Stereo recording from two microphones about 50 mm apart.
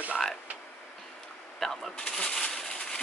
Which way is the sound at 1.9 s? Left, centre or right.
Centre.